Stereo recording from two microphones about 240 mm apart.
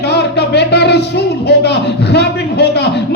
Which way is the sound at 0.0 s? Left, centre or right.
Left.